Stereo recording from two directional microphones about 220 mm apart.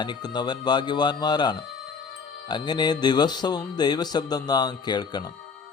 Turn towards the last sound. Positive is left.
turn(degrees=20)  # may be behind; listen again after turning